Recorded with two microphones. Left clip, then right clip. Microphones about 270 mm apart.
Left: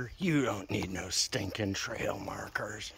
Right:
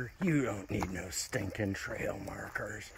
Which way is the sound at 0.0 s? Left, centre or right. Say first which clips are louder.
Left 2 dB; centre.